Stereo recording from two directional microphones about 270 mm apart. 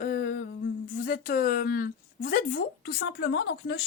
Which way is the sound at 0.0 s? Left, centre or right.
Left.